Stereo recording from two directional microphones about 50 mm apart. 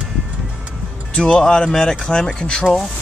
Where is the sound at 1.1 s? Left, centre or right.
Centre.